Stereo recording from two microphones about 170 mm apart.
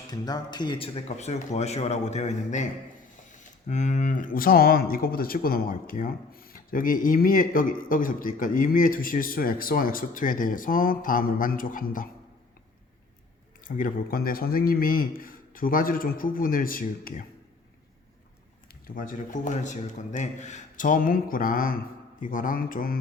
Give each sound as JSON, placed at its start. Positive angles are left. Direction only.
{"t": 0.1, "sound": "speech", "side_deg": 25}
{"t": 13.7, "sound": "speech", "side_deg": 55}
{"t": 18.9, "sound": "speech", "side_deg": 55}